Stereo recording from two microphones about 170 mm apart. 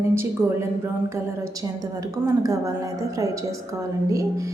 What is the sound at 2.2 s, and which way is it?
Speech, 20° right (ahead or behind).